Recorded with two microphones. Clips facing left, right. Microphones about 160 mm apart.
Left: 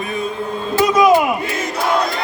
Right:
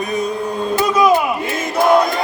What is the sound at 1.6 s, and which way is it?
Battle cry, 50° right (ahead or behind).